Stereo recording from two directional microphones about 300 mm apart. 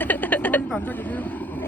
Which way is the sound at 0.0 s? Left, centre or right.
Centre.